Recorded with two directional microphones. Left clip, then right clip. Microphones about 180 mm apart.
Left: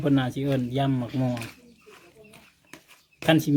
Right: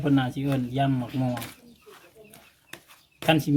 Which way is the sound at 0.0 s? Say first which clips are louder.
Even; 40° left (ahead or behind).